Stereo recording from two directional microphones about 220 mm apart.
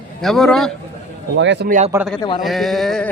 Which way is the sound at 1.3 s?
55° right (ahead or behind).